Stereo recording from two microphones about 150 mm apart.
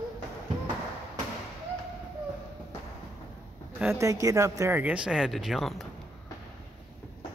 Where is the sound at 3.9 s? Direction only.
20° right (ahead or behind).